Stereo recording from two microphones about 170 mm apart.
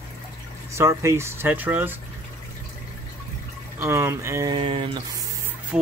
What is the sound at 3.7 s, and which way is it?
Speech, 15° right (ahead or behind).